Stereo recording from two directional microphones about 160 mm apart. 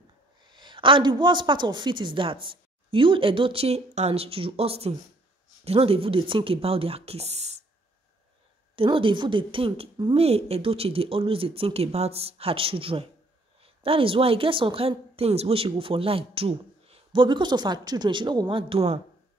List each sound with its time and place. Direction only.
0.5 s a woman's voice: 30° right (ahead or behind)
8.7 s a woman's voice: 35° right (ahead or behind)